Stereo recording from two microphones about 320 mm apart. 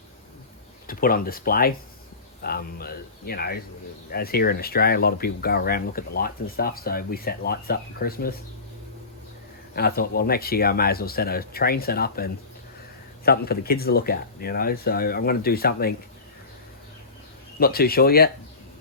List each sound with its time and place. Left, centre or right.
0.9 s speech: left
9.7 s speech: left
17.6 s speech: left